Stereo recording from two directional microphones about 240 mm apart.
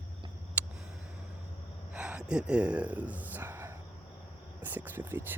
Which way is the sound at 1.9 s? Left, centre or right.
Centre.